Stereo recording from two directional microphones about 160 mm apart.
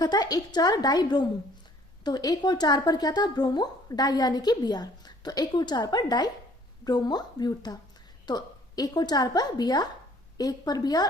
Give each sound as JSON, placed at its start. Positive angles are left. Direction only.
{"t": 0.0, "sound": "a woman's voice", "side_deg": 25}